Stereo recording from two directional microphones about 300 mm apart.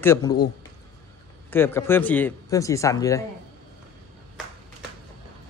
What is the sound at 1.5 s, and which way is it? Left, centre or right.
Speech, centre.